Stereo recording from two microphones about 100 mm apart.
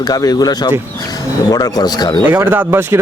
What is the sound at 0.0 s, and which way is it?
Speech, 40° left (ahead or behind).